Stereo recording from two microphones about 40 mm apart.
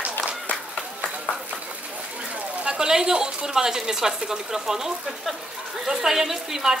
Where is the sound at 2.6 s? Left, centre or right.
Right.